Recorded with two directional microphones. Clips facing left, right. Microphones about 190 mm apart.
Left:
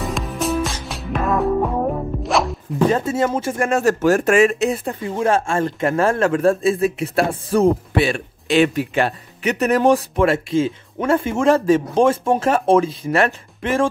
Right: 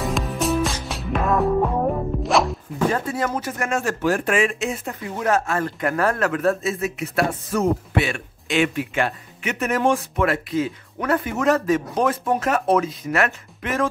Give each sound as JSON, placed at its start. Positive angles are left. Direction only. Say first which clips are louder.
{"t": 0.0, "sound": "music", "louder": "even", "side_deg": 0}
{"t": 2.9, "sound": "speech", "louder": "left 5 dB", "side_deg": 25}